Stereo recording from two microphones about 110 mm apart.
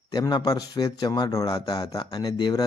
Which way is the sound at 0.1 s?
40° left (ahead or behind).